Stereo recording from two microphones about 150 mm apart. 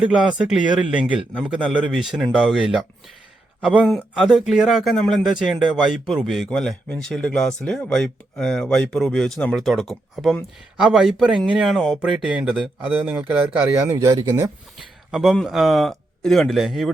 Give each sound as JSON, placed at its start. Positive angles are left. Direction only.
{"t": 0.0, "sound": "speech", "side_deg": -5}
{"t": 13.9, "sound": "speech", "side_deg": -25}
{"t": 15.1, "sound": "speech", "side_deg": 0}